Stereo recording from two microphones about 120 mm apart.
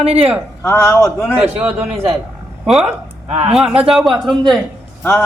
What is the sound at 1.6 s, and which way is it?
Speech, 15° right (ahead or behind).